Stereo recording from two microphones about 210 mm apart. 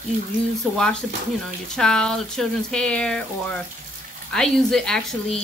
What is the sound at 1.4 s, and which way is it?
Speech, 5° left (ahead or behind).